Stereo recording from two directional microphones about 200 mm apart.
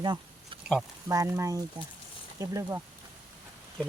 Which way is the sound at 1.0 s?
15° right (ahead or behind).